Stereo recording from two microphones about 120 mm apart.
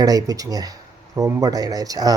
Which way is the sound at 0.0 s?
30° right (ahead or behind).